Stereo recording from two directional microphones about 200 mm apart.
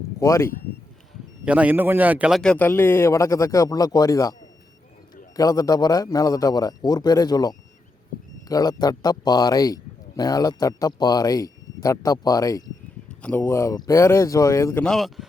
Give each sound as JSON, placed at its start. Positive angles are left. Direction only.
{"t": 0.2, "sound": "a man's voice", "side_deg": 15}
{"t": 1.5, "sound": "a man's voice", "side_deg": -5}
{"t": 5.4, "sound": "a man's voice", "side_deg": 20}
{"t": 14.8, "sound": "speech", "side_deg": 0}